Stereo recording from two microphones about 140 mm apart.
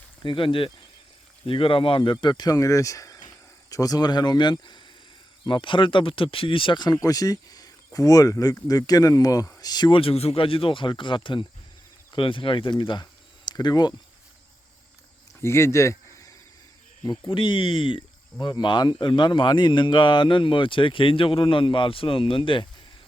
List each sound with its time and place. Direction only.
0.2 s speech: 35° left (ahead or behind)
15.4 s a sound: 20° left (ahead or behind)
17.0 s speech: 35° left (ahead or behind)